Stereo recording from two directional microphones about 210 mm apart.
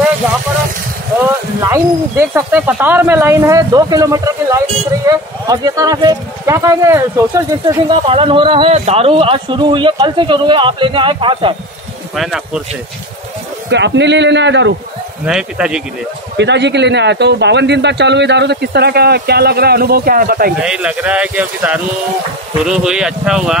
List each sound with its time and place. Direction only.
1.6 s speech: 10° right (ahead or behind)
7.9 s a man's voice: 25° right (ahead or behind)
12.2 s a man's voice: 5° right (ahead or behind)
13.7 s a man's voice: 55° right (ahead or behind)
15.2 s a man's voice: 5° right (ahead or behind)
16.3 s speech: 55° right (ahead or behind)
20.5 s a man's voice: 5° right (ahead or behind)